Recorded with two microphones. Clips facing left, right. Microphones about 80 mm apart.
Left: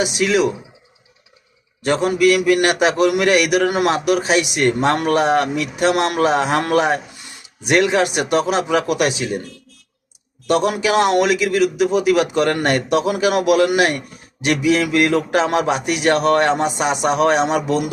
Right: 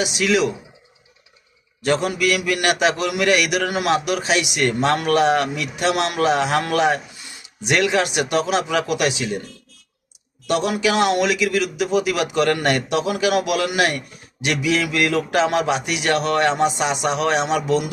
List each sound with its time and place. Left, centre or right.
0.0 s a man's voice: left
1.8 s a man's voice: left
10.4 s a man's voice: left